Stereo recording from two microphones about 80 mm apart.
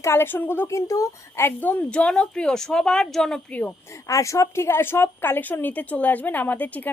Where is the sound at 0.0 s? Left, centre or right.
Left; by 3.4 s centre.